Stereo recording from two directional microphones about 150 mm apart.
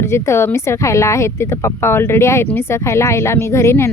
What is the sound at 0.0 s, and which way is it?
A woman's voice, 15° left (ahead or behind).